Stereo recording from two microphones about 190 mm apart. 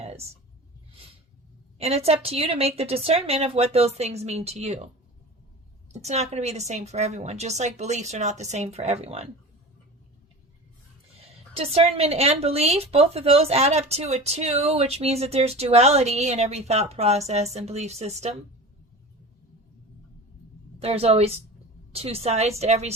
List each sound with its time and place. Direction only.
1.8 s a woman's voice: 30° right (ahead or behind)
5.9 s a woman's voice: 35° right (ahead or behind)
11.5 s a woman's voice: 30° right (ahead or behind)
20.7 s a woman's voice: 30° right (ahead or behind)